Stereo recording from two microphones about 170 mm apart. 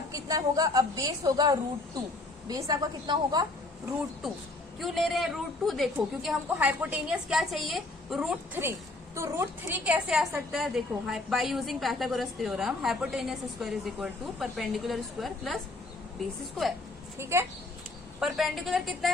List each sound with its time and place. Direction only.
0.1 s a woman's voice: 20° right (ahead or behind)
4.8 s a woman's voice: centre (ahead or behind)
9.1 s a woman's voice: 15° right (ahead or behind); by 15.6 s centre (ahead or behind)
17.2 s speech: 15° right (ahead or behind)
18.2 s a woman's voice: centre (ahead or behind)